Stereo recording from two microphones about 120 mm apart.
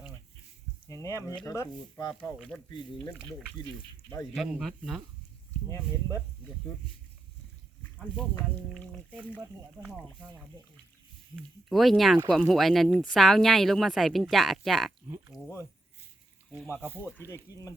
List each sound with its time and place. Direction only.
1.0 s speech: 25° left (ahead or behind)
4.4 s speech: centre (ahead or behind)
8.7 s speech: 10° left (ahead or behind)
11.7 s speech: centre (ahead or behind)
15.3 s speech: 30° left (ahead or behind)
17.2 s speech: 20° left (ahead or behind)